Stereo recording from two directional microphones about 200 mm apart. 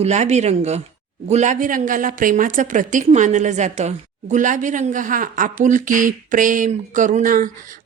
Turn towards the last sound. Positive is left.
turn(degrees=-40)  # may be behind; listen again after turning